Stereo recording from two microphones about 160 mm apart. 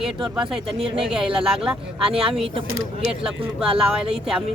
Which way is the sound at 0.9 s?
5° right (ahead or behind).